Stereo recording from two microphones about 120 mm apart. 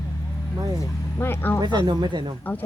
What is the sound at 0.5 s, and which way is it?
Speech, 30° right (ahead or behind).